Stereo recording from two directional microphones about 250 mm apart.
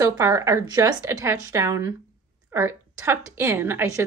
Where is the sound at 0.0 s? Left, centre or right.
Centre.